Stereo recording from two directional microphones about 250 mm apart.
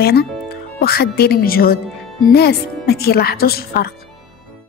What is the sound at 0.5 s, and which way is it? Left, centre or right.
A woman's voice, left.